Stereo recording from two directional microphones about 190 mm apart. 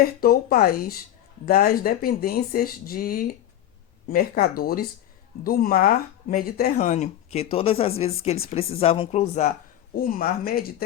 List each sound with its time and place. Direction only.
0.0 s speech: 50° left (ahead or behind)
9.9 s speech: 50° left (ahead or behind)